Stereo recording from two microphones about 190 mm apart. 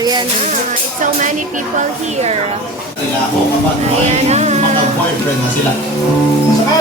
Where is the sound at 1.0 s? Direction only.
40° right (ahead or behind).